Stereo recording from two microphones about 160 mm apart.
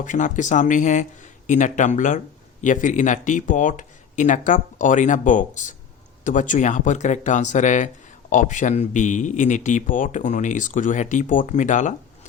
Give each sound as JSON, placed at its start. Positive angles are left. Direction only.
{"t": 0.0, "sound": "speech", "side_deg": 50}